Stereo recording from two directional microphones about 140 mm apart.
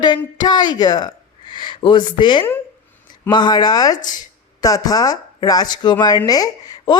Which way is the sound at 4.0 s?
65° left (ahead or behind).